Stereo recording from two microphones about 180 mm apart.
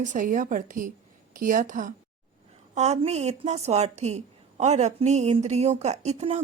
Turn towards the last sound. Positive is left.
turn(degrees=-35)  # may be behind; listen again after turning